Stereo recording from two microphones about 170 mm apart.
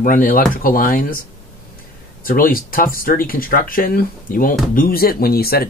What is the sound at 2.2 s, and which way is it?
Speech, 60° left (ahead or behind).